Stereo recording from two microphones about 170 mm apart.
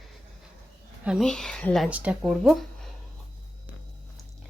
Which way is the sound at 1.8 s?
10° right (ahead or behind).